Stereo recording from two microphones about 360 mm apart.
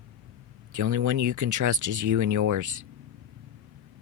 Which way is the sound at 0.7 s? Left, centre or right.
Right.